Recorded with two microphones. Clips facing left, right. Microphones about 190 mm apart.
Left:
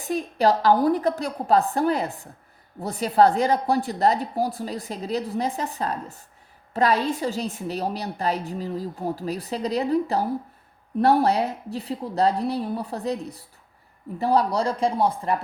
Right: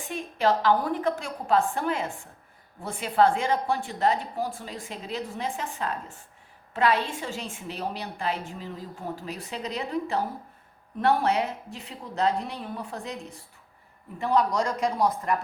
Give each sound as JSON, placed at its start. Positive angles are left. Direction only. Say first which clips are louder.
{"t": 0.0, "sound": "a woman's voice", "louder": "left 5 dB", "side_deg": 40}